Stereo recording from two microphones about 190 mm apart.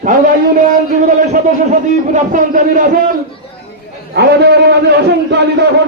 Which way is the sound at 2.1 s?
45° right (ahead or behind).